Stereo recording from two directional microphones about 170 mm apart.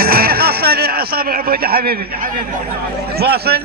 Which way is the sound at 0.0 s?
60° right (ahead or behind).